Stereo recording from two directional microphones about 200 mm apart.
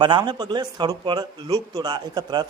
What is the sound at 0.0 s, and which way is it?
Speech, 25° right (ahead or behind).